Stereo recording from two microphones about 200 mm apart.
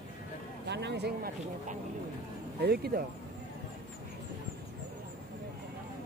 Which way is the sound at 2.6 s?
50° right (ahead or behind).